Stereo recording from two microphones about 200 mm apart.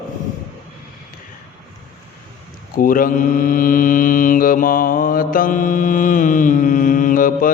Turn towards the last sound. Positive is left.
turn(degrees=45)  # may be behind; listen again after turning